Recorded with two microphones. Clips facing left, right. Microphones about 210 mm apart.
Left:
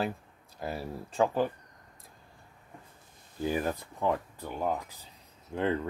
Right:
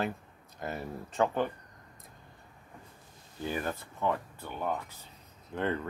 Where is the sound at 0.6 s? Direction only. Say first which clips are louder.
Left 1 dB; 35° left (ahead or behind).